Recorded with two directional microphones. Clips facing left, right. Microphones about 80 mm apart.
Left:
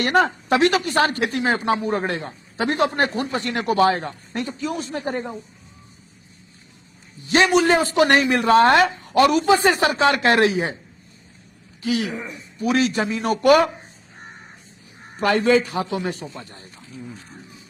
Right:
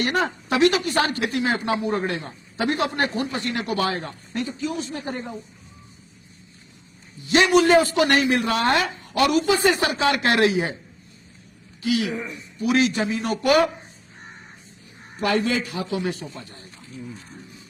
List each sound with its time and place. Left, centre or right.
0.0 s speech: left
4.3 s speech: left
7.2 s speech: left
11.8 s speech: left
12.1 s a man's voice: centre
12.6 s speech: left
15.2 s speech: left